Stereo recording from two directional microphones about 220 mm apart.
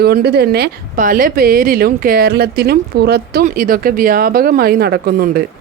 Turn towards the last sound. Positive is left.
turn(degrees=-45)  # may be behind; listen again after turning